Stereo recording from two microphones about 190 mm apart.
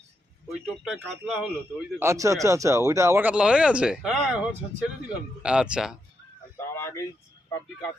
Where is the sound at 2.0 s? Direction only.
15° right (ahead or behind).